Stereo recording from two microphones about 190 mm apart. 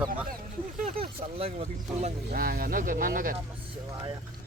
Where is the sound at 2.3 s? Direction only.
50° right (ahead or behind).